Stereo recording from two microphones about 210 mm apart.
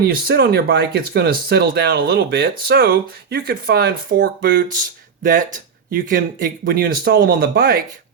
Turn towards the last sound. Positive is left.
turn(degrees=-45)  # may be behind; listen again after turning